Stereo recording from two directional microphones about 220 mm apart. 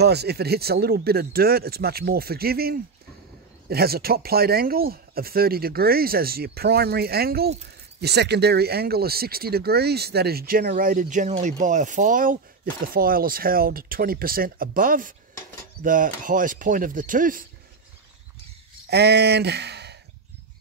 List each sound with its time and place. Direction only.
0.0 s speech: 50° right (ahead or behind)
18.9 s speech: 50° right (ahead or behind)